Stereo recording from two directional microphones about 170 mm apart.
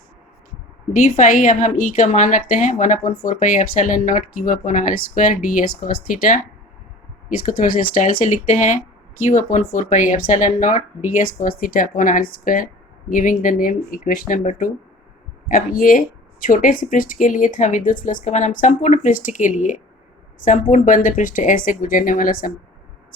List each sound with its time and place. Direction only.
1.0 s speech: 55° left (ahead or behind)
7.4 s speech: 55° left (ahead or behind)